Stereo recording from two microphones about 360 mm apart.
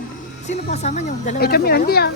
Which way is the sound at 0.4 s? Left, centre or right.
Centre.